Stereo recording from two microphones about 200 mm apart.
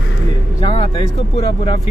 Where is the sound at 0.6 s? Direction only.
25° left (ahead or behind).